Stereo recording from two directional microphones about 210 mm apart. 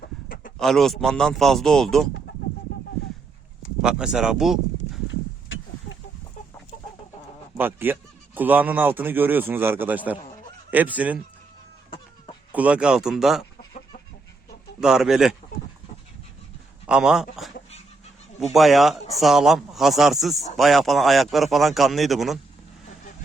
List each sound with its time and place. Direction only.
0.0 s a sound: 45° left (ahead or behind)
0.6 s a man's voice: centre (ahead or behind)
3.8 s a man's voice: 5° right (ahead or behind)
7.5 s a man's voice: 10° right (ahead or behind)
11.9 s chicken: 25° left (ahead or behind)
12.5 s a man's voice: 5° right (ahead or behind)
14.8 s a man's voice: centre (ahead or behind)
16.8 s a man's voice: 5° right (ahead or behind)
18.5 s a man's voice: centre (ahead or behind)